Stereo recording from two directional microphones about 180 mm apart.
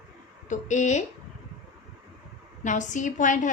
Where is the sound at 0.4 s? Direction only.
45° left (ahead or behind).